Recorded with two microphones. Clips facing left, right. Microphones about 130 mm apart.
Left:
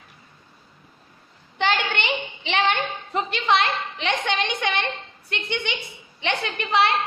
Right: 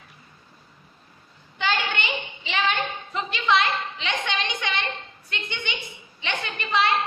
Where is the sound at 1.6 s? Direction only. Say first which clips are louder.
Left 3 dB; 65° left (ahead or behind).